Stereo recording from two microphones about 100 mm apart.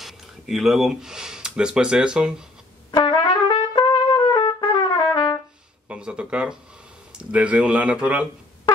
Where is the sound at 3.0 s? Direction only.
55° left (ahead or behind).